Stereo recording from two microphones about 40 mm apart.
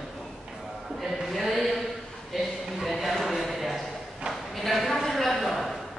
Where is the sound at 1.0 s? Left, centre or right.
Centre.